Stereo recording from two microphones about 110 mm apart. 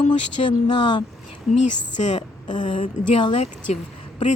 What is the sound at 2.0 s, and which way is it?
Speech, 90° left.